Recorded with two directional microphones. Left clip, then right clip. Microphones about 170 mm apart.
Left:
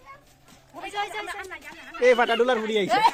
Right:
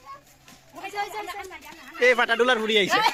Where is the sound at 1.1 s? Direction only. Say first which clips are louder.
Left 1 dB; 20° right (ahead or behind).